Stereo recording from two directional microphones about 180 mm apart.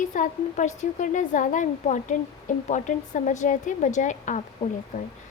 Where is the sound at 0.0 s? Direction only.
45° left (ahead or behind).